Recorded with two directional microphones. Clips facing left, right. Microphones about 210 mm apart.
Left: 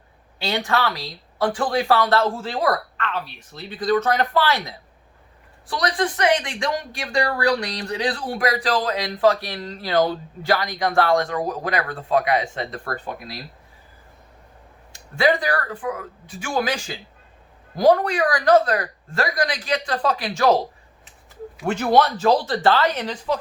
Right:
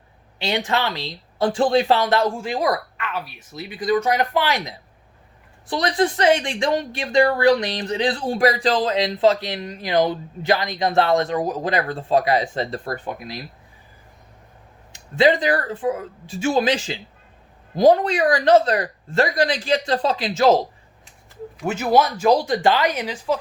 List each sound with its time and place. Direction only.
0.3 s a woman's voice: 20° right (ahead or behind)
12.9 s a woman's voice: 20° right (ahead or behind)
14.9 s a woman's voice: 20° right (ahead or behind)
21.7 s speech: 5° right (ahead or behind)